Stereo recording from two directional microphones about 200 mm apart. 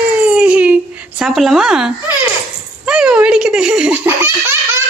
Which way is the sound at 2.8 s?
5° right (ahead or behind).